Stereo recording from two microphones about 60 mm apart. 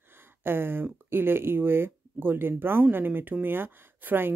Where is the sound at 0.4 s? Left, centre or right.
Right.